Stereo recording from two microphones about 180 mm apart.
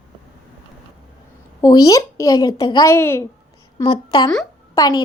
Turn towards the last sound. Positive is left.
turn(degrees=20)  # may be behind; listen again after turning